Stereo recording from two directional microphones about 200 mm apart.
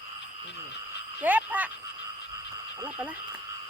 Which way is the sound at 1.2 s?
10° right (ahead or behind).